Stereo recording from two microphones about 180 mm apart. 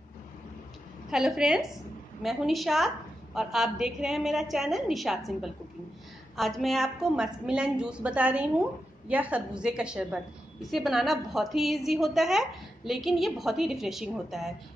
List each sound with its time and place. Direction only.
1.1 s a woman's voice: centre (ahead or behind)